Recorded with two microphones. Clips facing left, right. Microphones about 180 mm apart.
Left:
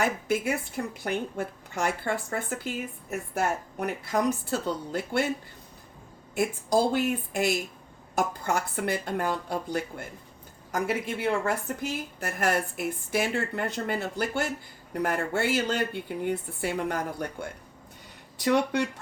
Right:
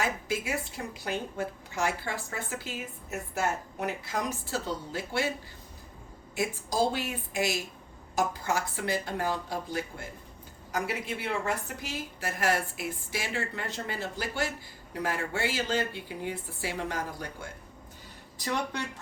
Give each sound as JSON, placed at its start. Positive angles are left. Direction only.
{"t": 0.0, "sound": "a woman's voice", "side_deg": 55}
{"t": 6.3, "sound": "a woman's voice", "side_deg": 55}
{"t": 18.3, "sound": "speech", "side_deg": 65}